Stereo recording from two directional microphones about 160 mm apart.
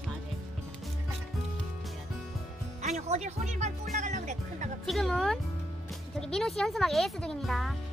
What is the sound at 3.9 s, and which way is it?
Music, 50° right (ahead or behind).